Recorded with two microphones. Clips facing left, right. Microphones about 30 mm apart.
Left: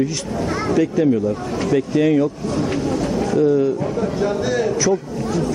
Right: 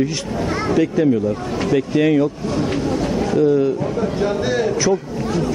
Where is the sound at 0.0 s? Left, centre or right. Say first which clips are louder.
Right 1 dB; centre.